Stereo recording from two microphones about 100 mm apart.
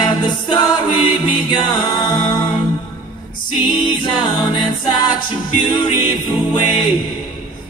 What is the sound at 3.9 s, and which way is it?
A capella, 45° left (ahead or behind).